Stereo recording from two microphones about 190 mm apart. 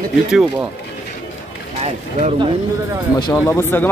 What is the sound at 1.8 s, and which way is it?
Speech, 35° right (ahead or behind).